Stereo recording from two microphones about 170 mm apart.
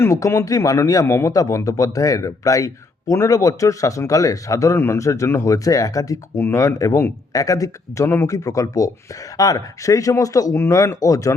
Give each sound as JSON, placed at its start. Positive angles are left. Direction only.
{"t": 0.0, "sound": "speech", "side_deg": 15}